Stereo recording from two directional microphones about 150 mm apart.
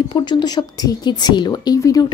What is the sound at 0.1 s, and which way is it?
A woman's voice, 30° left (ahead or behind).